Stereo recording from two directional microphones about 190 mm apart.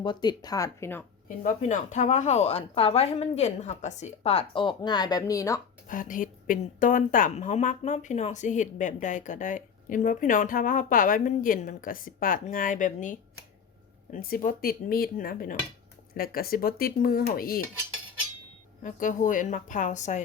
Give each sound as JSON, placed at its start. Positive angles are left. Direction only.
{"t": 0.0, "sound": "speech", "side_deg": 25}
{"t": 1.5, "sound": "a woman's voice", "side_deg": 40}
{"t": 5.9, "sound": "a woman's voice", "side_deg": 45}
{"t": 18.8, "sound": "a woman's voice", "side_deg": 40}